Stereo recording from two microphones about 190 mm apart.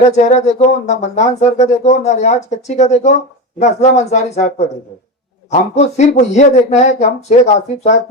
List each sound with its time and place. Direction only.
0.0 s speech: 40° left (ahead or behind)